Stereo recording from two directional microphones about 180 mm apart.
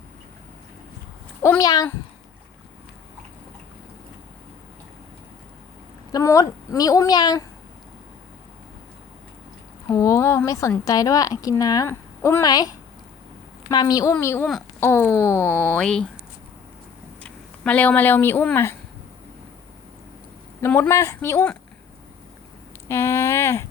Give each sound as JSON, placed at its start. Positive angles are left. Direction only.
{"t": 1.4, "sound": "a woman's voice", "side_deg": 15}
{"t": 6.1, "sound": "a woman's voice", "side_deg": 20}
{"t": 9.9, "sound": "a woman's voice", "side_deg": 15}
{"t": 15.4, "sound": "speech", "side_deg": -15}
{"t": 15.7, "sound": "speech", "side_deg": 5}
{"t": 17.2, "sound": "speech", "side_deg": 5}
{"t": 20.6, "sound": "speech", "side_deg": 15}
{"t": 22.9, "sound": "a sound", "side_deg": 15}